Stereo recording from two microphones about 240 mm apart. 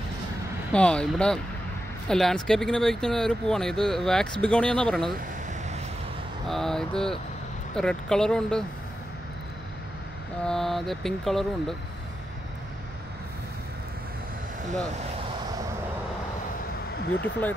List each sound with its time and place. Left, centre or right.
0.7 s speech: centre
6.4 s speech: centre
10.4 s speech: centre
16.9 s a sound: left